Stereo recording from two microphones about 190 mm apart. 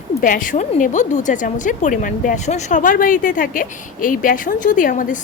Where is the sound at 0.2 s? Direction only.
45° left (ahead or behind).